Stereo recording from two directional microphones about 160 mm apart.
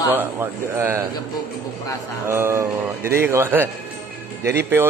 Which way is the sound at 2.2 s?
15° right (ahead or behind).